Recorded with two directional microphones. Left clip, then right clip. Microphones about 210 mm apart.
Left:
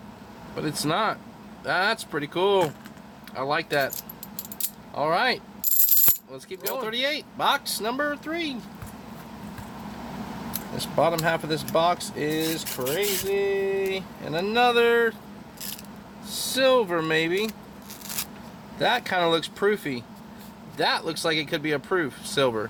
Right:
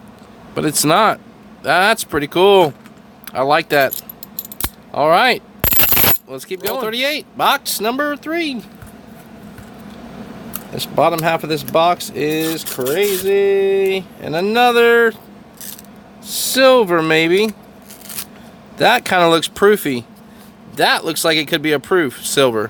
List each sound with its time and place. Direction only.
0.5 s speech: 45° right (ahead or behind)
4.9 s speech: 45° right (ahead or behind)
10.8 s speech: 45° right (ahead or behind)
16.2 s speech: 50° right (ahead or behind)
18.8 s speech: 50° right (ahead or behind)